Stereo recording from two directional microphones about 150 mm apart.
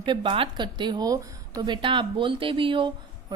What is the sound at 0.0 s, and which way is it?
A woman's voice, 35° right (ahead or behind).